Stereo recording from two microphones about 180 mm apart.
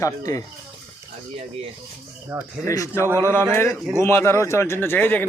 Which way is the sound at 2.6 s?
20° left (ahead or behind).